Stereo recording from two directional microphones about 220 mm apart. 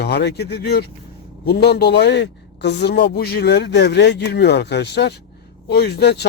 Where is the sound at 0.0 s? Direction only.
50° left (ahead or behind).